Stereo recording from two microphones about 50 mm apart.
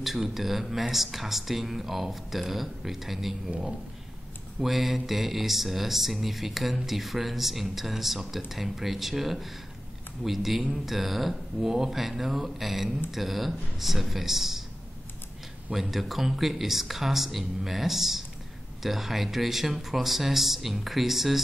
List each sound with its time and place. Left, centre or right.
0.0 s speech: centre
4.6 s speech: centre
15.7 s speech: centre